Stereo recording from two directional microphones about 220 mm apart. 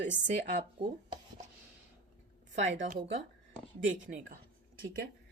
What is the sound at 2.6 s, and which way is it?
Speech, 35° right (ahead or behind).